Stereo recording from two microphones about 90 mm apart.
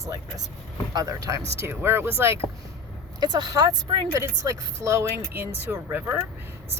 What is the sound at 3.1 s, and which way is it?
Speech, 50° right (ahead or behind).